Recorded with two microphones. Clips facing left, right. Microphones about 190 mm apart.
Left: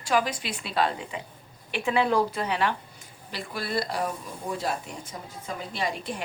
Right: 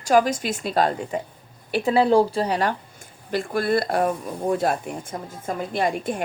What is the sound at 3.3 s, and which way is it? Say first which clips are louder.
A woman's voice: right 11 dB; 50° right (ahead or behind).